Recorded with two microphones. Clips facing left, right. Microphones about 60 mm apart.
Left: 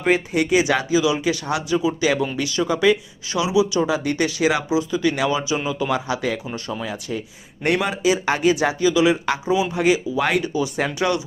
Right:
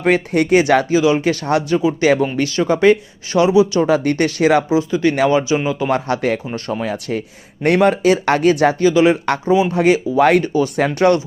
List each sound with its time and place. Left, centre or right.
0.0 s speech: right
3.8 s speech: right
4.8 s speech: right
5.4 s speech: right
5.9 s speech: right